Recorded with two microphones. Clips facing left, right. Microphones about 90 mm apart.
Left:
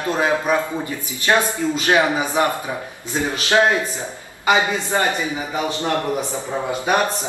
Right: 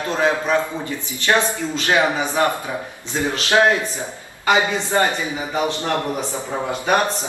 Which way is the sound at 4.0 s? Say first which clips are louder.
Even; 15° left (ahead or behind).